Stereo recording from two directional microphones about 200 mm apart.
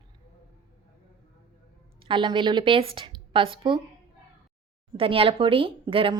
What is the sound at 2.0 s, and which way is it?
A woman's voice, 25° right (ahead or behind).